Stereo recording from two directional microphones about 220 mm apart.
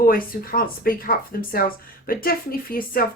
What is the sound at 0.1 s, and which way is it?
Speech, 40° left (ahead or behind).